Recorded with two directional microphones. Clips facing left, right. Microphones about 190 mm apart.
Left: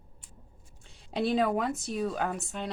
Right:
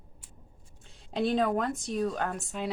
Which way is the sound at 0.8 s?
Centre (ahead or behind).